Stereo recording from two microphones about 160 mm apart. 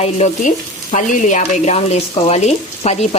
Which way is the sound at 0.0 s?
50° left (ahead or behind).